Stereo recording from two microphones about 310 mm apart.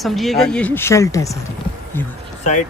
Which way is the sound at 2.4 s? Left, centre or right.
Left.